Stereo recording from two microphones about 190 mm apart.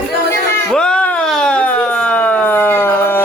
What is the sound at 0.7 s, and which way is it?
Siren, 5° left (ahead or behind).